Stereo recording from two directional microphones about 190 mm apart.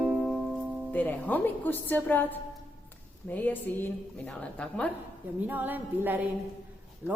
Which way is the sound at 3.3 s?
10° left (ahead or behind).